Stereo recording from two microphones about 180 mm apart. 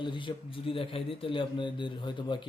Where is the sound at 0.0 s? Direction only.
25° left (ahead or behind).